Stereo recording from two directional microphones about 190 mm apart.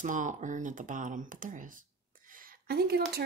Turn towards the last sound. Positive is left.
turn(degrees=-55)  # may be behind; listen again after turning